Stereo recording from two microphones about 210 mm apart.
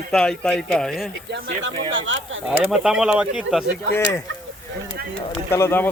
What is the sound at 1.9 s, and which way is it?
Speech, 65° right (ahead or behind).